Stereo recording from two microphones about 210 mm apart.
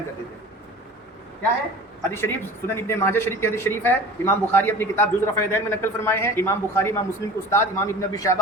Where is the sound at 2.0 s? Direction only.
10° left (ahead or behind).